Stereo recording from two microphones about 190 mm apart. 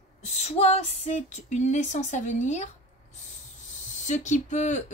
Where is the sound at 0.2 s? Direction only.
35° left (ahead or behind).